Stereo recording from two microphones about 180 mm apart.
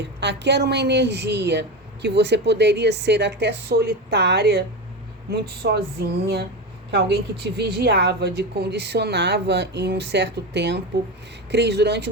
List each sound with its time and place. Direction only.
0.0 s speech: 70° right (ahead or behind)
5.3 s a sound: 65° right (ahead or behind)
6.9 s speech: 65° right (ahead or behind)